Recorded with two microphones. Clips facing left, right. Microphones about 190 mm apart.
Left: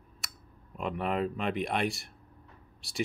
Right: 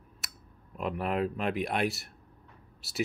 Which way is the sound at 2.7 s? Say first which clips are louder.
Right 1 dB; 5° right (ahead or behind).